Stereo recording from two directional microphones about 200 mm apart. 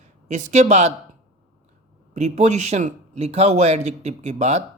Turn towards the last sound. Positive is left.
turn(degrees=-35)  # may be behind; listen again after turning